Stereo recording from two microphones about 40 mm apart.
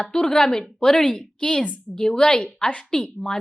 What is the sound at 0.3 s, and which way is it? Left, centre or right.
A woman's voice, centre.